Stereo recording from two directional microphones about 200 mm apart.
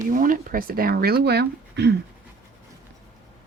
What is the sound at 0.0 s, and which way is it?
Speech, 40° right (ahead or behind).